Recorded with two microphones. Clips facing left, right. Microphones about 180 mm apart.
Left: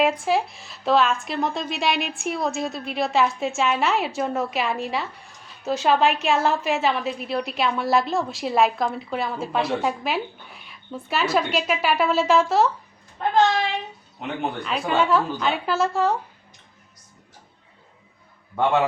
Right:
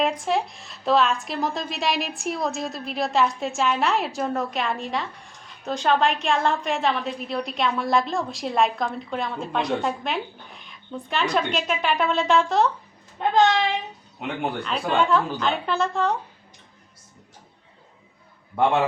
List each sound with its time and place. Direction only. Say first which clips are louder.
0.0 s a woman's voice: left 2 dB; 5° left (ahead or behind)
13.2 s speech: right 1 dB; 20° right (ahead or behind)
14.6 s a woman's voice: left 1 dB; 5° left (ahead or behind)